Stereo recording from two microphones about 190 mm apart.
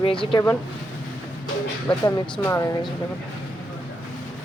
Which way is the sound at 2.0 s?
15° left (ahead or behind).